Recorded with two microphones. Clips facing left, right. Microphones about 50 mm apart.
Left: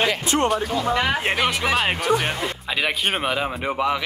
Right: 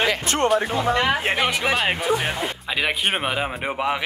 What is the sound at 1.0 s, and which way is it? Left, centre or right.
Speech, centre.